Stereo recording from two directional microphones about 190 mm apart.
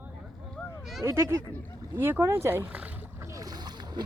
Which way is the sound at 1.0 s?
15° right (ahead or behind).